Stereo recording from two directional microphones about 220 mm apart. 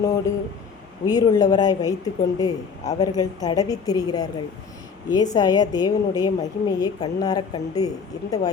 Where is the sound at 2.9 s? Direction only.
15° left (ahead or behind).